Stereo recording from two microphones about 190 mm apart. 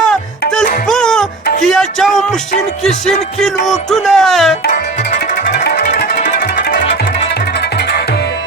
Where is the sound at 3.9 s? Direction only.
Centre (ahead or behind).